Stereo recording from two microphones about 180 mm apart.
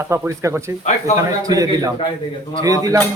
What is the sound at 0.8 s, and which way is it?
Speech, 40° left (ahead or behind).